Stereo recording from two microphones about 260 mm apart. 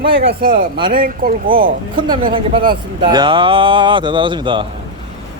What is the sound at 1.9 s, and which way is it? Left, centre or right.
Speech, centre.